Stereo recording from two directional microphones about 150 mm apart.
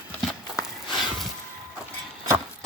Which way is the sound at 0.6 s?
Centre (ahead or behind).